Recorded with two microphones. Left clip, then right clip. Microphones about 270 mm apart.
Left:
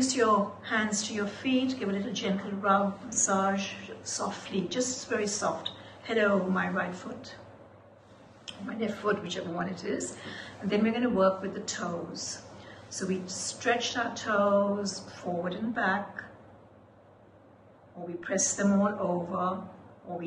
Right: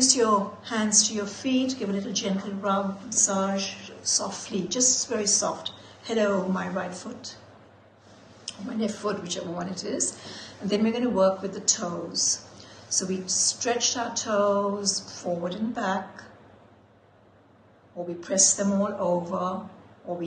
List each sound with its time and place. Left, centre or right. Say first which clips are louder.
0.0 s a sound: right 5 dB; centre
0.7 s a woman's voice: right 5 dB; centre
8.6 s a woman's voice: right 1 dB; centre
18.2 s a woman's voice: right 5 dB; centre